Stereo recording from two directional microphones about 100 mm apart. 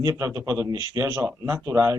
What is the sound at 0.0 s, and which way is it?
Speech, 30° right (ahead or behind).